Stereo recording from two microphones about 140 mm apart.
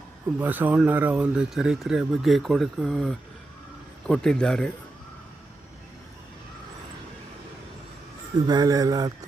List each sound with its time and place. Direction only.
0.3 s speech: 10° right (ahead or behind); by 4.7 s 5° left (ahead or behind)
8.4 s speech: 30° right (ahead or behind)